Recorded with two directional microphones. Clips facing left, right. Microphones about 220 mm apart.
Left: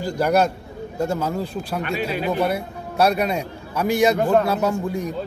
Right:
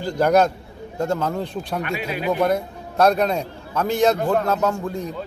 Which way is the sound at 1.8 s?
30° left (ahead or behind).